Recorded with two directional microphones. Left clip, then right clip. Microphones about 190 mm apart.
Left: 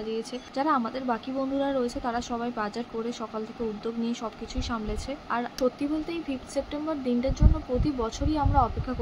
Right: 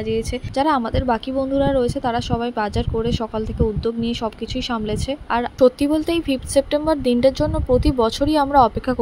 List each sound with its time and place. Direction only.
0.1 s speech: 35° right (ahead or behind)